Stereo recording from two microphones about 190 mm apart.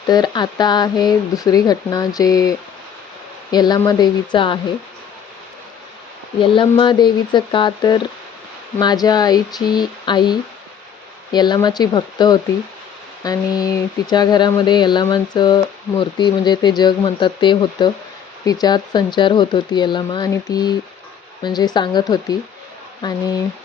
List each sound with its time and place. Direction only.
0.1 s speech: 20° left (ahead or behind)
6.4 s speech: 25° left (ahead or behind)